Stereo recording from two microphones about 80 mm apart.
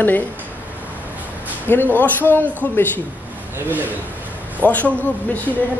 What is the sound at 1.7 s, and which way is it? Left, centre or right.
A woman's voice, left.